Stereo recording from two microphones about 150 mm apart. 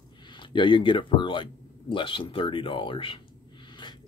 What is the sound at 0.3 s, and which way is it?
Speech, 30° left (ahead or behind).